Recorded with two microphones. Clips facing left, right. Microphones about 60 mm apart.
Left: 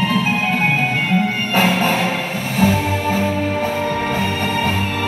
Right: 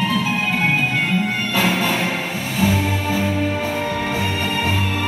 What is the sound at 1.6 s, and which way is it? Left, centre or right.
Music, left.